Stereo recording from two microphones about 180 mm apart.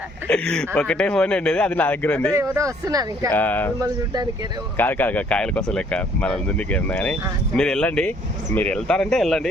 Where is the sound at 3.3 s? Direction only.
10° left (ahead or behind).